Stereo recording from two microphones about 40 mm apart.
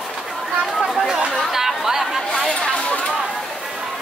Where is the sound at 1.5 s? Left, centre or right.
Centre.